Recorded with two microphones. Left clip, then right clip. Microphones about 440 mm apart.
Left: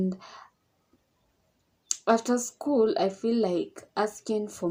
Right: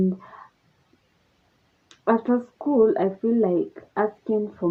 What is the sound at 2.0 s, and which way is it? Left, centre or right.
Speech, right.